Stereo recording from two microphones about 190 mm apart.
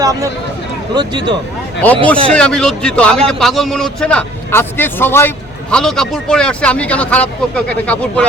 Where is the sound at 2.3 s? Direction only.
5° left (ahead or behind).